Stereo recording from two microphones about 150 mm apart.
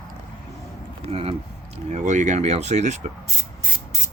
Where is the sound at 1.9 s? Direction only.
55° right (ahead or behind).